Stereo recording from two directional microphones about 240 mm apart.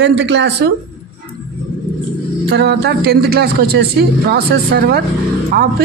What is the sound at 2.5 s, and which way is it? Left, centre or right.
Speech, right.